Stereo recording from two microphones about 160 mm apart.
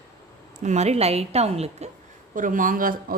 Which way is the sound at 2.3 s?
55° right (ahead or behind).